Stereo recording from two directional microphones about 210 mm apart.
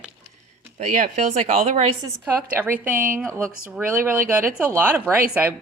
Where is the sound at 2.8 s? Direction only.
10° right (ahead or behind).